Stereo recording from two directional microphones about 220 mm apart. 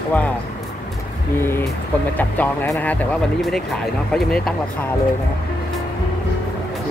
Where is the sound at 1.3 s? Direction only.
10° left (ahead or behind).